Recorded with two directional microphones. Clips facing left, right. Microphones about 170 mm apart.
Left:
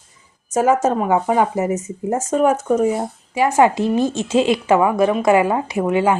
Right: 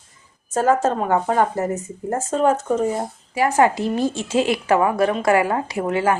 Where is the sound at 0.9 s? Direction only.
10° left (ahead or behind).